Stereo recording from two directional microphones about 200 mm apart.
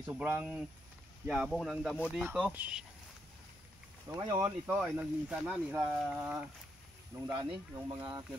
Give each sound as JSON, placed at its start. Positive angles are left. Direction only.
{"t": 0.0, "sound": "speech", "side_deg": -10}
{"t": 4.1, "sound": "speech", "side_deg": -20}
{"t": 4.7, "sound": "speech", "side_deg": -5}
{"t": 7.2, "sound": "speech", "side_deg": -20}